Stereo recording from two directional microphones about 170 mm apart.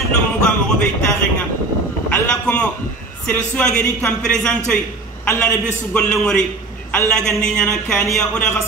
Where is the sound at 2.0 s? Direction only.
5° left (ahead or behind).